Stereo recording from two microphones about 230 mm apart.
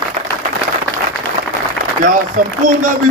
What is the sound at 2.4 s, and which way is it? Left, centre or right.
Speech, right.